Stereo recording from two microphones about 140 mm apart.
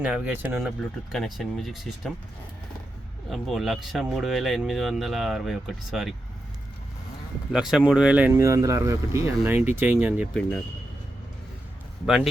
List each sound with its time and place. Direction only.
0.0 s speech: 10° right (ahead or behind)
1.1 s speech: centre (ahead or behind)
3.2 s speech: centre (ahead or behind)
7.5 s speech: 5° right (ahead or behind)
12.0 s speech: centre (ahead or behind)